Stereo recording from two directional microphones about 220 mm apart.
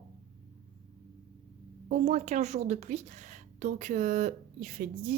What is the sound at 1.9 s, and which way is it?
A woman's voice, 30° right (ahead or behind).